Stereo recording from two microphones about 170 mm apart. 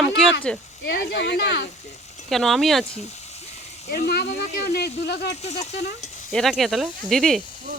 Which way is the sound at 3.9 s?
65° left (ahead or behind).